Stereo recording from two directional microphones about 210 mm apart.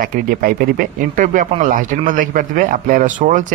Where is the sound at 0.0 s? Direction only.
45° right (ahead or behind).